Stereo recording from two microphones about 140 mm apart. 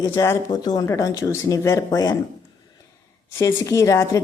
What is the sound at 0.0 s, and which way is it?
Speech, 20° left (ahead or behind).